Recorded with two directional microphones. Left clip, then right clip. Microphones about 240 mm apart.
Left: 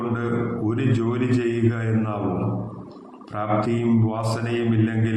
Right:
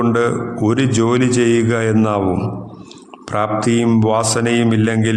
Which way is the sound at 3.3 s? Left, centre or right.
Right.